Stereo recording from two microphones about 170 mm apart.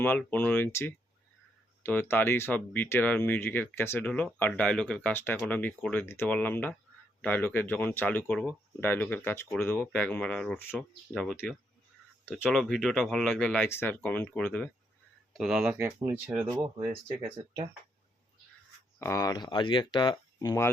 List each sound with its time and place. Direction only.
0.0 s speech: 10° left (ahead or behind)
15.3 s speech: 5° right (ahead or behind)
18.9 s speech: 15° left (ahead or behind)